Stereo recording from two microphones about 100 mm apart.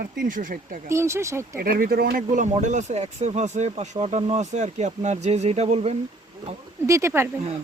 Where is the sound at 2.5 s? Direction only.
90° right.